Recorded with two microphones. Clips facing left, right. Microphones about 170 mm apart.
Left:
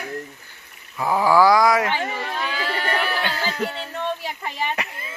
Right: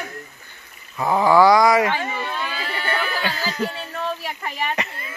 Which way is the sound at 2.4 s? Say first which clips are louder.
Left 2 dB; 75° left (ahead or behind).